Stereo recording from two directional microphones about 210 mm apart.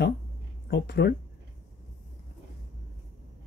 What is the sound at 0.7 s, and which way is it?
Speech, 50° left (ahead or behind).